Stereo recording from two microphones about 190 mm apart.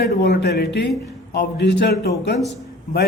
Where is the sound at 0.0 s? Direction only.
60° left (ahead or behind).